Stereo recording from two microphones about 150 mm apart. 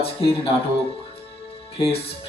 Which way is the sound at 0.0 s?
40° left (ahead or behind).